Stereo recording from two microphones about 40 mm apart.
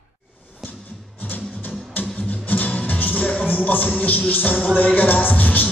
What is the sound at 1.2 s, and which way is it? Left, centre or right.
Music, left.